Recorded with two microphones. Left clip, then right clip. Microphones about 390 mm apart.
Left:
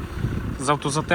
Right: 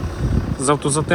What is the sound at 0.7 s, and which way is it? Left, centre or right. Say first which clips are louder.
Speech: right 4 dB; centre.